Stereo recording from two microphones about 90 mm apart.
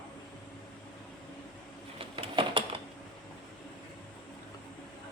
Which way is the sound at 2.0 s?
80° right.